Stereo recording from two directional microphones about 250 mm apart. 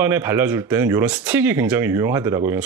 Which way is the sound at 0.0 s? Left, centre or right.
Centre.